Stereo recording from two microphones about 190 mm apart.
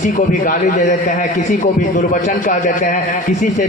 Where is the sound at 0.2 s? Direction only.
40° left (ahead or behind).